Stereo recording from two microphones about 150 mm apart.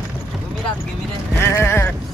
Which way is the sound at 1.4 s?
15° left (ahead or behind).